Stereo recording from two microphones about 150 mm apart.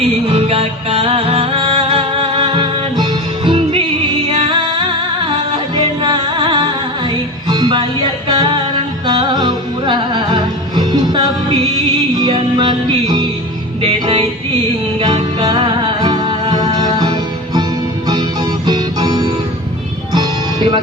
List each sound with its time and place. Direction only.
0.3 s music: 40° right (ahead or behind)